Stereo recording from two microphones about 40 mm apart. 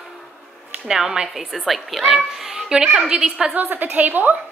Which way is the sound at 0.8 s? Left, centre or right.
Centre.